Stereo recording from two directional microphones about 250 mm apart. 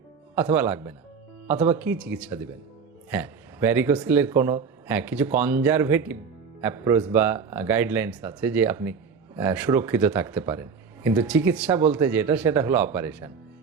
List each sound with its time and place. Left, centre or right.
0.3 s speech: centre